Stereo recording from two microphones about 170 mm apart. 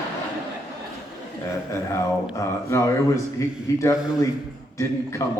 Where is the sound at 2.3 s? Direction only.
15° left (ahead or behind).